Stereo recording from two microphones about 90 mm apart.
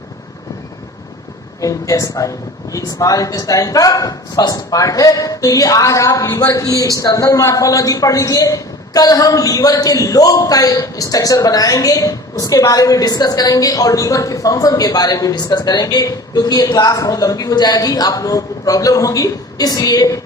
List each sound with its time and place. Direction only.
1.6 s a woman's voice: 40° left (ahead or behind)